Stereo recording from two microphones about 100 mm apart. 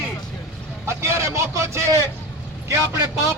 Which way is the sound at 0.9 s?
25° right (ahead or behind).